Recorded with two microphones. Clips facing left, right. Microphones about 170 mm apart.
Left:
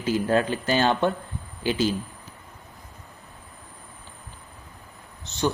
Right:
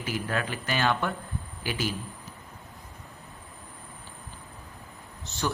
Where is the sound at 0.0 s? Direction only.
30° left (ahead or behind).